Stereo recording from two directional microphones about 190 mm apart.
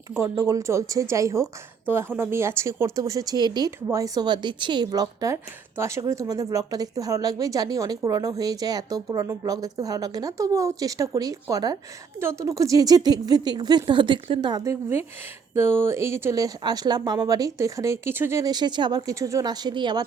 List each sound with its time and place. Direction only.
0.2 s a woman's voice: 15° right (ahead or behind)